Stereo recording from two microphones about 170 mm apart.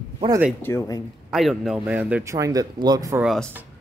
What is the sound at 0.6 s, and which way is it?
Speech, 15° left (ahead or behind).